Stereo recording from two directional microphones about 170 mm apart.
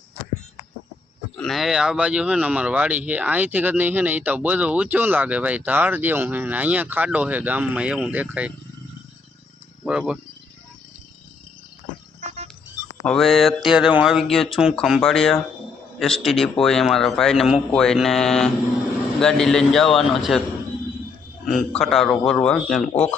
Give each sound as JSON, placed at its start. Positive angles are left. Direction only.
{"t": 1.4, "sound": "speech", "side_deg": 0}
{"t": 9.8, "sound": "speech", "side_deg": -5}
{"t": 12.2, "sound": "a sound", "side_deg": -40}
{"t": 13.1, "sound": "a man's voice", "side_deg": 0}
{"t": 21.4, "sound": "a man's voice", "side_deg": 0}